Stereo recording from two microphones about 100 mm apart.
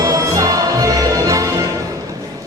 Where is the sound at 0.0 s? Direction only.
35° right (ahead or behind).